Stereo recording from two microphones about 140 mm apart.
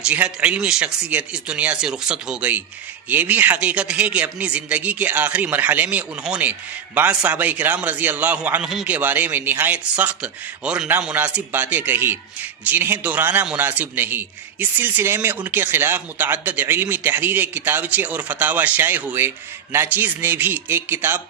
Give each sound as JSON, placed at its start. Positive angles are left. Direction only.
{"t": 0.0, "sound": "speech", "side_deg": -10}